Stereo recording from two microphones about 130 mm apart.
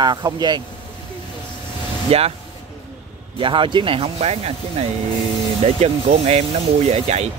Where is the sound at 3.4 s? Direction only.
40° right (ahead or behind); by 7.3 s 55° right (ahead or behind).